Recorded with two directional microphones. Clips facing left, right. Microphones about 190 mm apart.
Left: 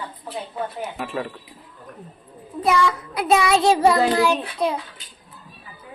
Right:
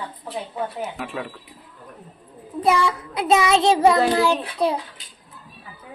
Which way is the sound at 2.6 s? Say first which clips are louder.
Even; 25° right (ahead or behind).